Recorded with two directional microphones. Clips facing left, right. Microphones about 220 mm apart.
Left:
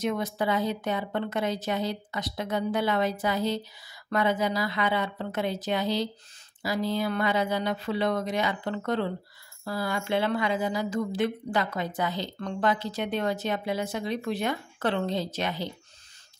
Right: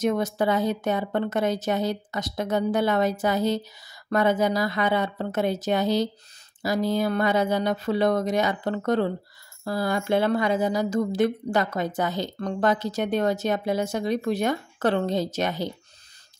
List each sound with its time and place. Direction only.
0.0 s speech: 45° right (ahead or behind)